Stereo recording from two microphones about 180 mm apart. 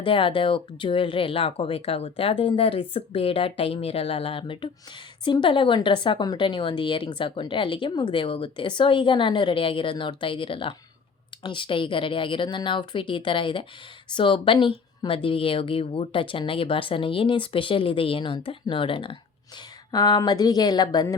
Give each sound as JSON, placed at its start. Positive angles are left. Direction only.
{"t": 0.0, "sound": "speech", "side_deg": 30}